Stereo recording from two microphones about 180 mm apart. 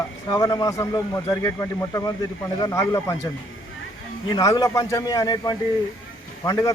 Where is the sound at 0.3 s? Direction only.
20° left (ahead or behind).